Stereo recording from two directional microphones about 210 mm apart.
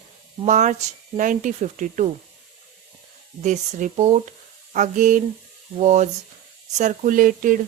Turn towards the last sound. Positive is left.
turn(degrees=-40)  # may be behind; listen again after turning